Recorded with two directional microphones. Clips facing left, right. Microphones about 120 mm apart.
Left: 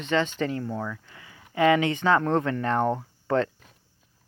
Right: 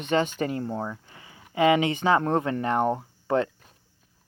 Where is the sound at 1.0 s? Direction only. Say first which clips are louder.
Even; 25° right (ahead or behind).